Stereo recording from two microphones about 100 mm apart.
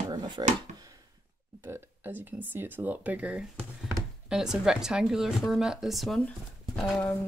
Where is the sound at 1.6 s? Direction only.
20° right (ahead or behind); by 6.1 s centre (ahead or behind).